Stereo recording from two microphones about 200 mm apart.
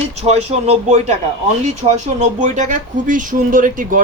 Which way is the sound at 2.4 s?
40° right (ahead or behind).